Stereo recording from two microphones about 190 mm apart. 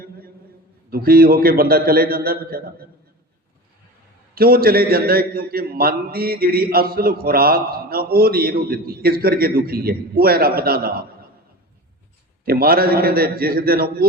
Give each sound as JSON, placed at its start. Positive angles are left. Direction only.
{"t": 0.9, "sound": "a man's voice", "side_deg": -50}
{"t": 4.4, "sound": "a man's voice", "side_deg": -50}
{"t": 12.5, "sound": "a man's voice", "side_deg": -50}